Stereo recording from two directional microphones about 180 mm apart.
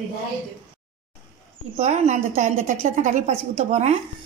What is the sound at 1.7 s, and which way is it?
A woman's voice, 40° right (ahead or behind).